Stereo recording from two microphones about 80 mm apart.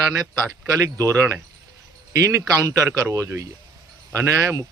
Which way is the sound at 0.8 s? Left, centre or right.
Right.